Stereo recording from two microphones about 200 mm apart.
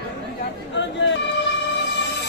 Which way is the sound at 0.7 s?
65° left (ahead or behind).